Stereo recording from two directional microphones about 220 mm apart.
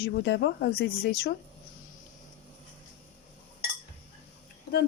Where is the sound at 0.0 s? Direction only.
50° left (ahead or behind).